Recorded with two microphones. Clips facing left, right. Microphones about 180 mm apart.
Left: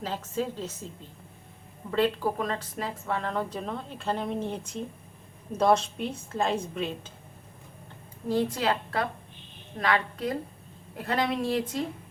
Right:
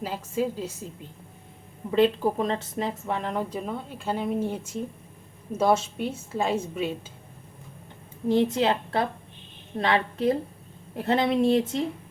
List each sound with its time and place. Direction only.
0.0 s a woman's voice: 10° right (ahead or behind)
1.9 s a woman's voice: 20° right (ahead or behind)
8.3 s speech: 20° right (ahead or behind)